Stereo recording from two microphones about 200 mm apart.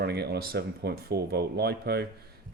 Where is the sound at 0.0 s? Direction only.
55° right (ahead or behind).